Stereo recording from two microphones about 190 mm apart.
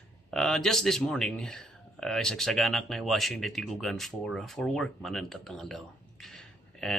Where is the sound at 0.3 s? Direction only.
Centre (ahead or behind).